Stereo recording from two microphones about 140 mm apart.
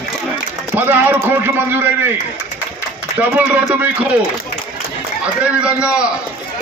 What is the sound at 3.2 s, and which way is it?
Speech, 10° right (ahead or behind).